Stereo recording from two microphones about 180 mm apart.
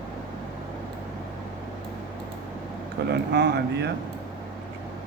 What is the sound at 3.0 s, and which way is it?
Speech, 65° right (ahead or behind).